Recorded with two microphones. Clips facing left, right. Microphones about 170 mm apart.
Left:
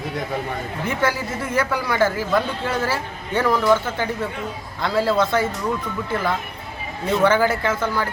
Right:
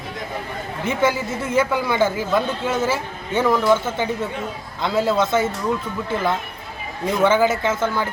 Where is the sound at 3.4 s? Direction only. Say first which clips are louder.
Right 1 dB; 5° right (ahead or behind).